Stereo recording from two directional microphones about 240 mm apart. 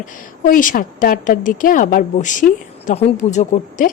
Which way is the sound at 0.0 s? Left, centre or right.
Left.